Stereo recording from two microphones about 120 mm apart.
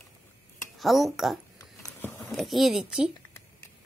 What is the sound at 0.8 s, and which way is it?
Speech, centre (ahead or behind).